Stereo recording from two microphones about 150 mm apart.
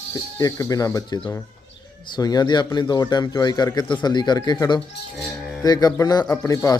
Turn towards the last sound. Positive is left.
turn(degrees=20)  # may be behind; listen again after turning